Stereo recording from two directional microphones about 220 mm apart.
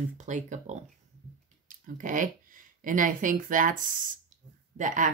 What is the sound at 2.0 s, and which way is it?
Speech, 35° right (ahead or behind).